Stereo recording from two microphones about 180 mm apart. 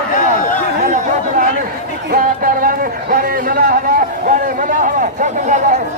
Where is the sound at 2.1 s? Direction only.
50° right (ahead or behind).